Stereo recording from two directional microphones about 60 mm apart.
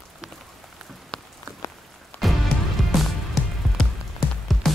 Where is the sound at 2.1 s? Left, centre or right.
Left.